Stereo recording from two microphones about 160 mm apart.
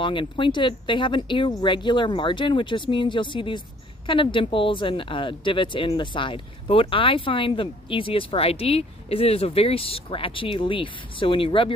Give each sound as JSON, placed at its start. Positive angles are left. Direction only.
{"t": 0.0, "sound": "speech", "side_deg": 30}